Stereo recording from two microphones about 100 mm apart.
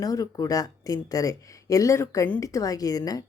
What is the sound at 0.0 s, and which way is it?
A woman's voice, 40° left (ahead or behind).